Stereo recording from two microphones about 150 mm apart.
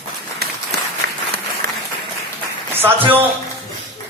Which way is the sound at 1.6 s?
85° right.